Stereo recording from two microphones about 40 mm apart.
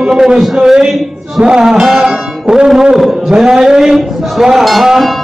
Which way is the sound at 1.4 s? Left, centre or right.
Centre.